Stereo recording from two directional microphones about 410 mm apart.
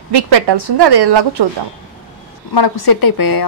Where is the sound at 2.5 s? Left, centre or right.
Left.